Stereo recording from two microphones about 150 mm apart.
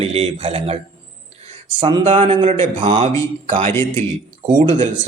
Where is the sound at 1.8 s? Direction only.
30° right (ahead or behind).